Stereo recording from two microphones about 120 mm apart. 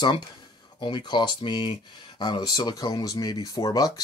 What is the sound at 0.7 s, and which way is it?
Speech, 40° left (ahead or behind).